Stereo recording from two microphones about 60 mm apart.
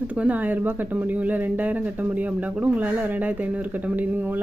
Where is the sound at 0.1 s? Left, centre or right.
Right.